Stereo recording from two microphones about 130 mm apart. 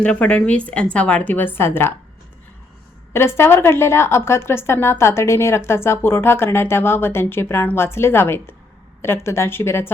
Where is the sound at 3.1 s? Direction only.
20° left (ahead or behind).